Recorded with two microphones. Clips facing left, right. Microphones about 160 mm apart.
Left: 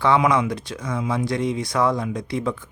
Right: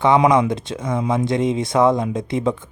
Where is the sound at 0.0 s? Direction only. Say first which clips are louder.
Right 4 dB; 20° right (ahead or behind).